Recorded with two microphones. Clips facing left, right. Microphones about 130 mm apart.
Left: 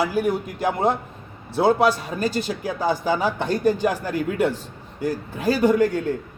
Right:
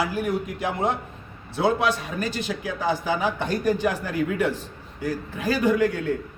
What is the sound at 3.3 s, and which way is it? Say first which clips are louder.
Speech: left 3 dB; 30° left (ahead or behind).